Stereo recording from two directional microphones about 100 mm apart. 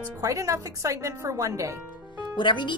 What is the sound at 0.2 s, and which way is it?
Speech, 35° right (ahead or behind).